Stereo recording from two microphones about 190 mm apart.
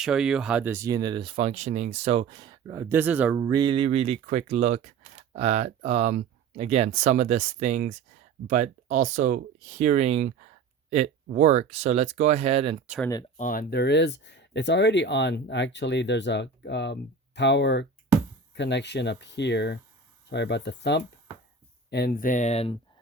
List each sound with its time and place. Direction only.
0.0 s speech: 5° right (ahead or behind)
3.3 s speech: 20° right (ahead or behind)
13.3 s speech: 45° left (ahead or behind)